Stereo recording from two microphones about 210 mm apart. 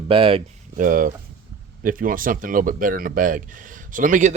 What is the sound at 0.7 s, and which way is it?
Speech, 40° right (ahead or behind).